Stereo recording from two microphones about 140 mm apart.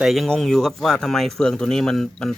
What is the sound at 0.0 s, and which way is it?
Speech, centre (ahead or behind).